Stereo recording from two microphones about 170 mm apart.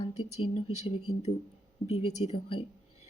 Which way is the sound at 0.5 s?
40° left (ahead or behind).